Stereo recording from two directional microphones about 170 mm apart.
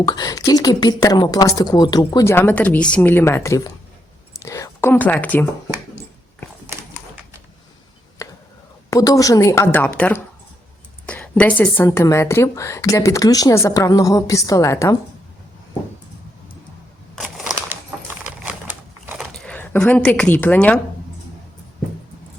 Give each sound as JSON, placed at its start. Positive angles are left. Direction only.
{"t": 0.0, "sound": "a woman's voice", "side_deg": 25}
{"t": 8.9, "sound": "a woman's voice", "side_deg": 20}
{"t": 17.2, "sound": "a sound", "side_deg": -10}
{"t": 18.3, "sound": "crumpling", "side_deg": -10}